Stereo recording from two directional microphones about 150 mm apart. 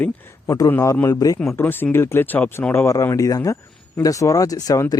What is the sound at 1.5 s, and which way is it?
Speech, 15° left (ahead or behind).